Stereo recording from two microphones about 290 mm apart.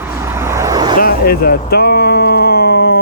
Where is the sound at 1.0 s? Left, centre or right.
Left.